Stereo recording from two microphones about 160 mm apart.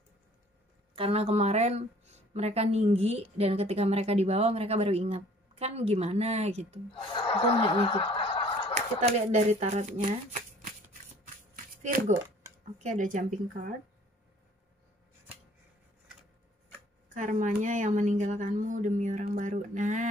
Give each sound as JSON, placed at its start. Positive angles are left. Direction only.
{"t": 0.9, "sound": "a woman's voice", "side_deg": -35}
{"t": 6.9, "sound": "speech", "side_deg": 35}
{"t": 7.7, "sound": "snicker", "side_deg": 30}
{"t": 8.7, "sound": "speech", "side_deg": -40}
{"t": 11.5, "sound": "a sound", "side_deg": -60}
{"t": 12.7, "sound": "speech", "side_deg": -50}
{"t": 17.1, "sound": "speech", "side_deg": -50}